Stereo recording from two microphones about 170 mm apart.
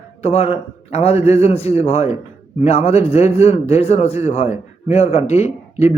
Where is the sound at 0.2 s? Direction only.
40° left (ahead or behind).